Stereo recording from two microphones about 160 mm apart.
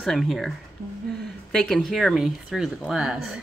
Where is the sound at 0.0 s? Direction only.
Centre (ahead or behind).